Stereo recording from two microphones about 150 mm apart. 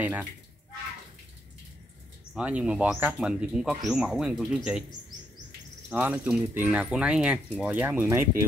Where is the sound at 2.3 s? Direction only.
5° right (ahead or behind).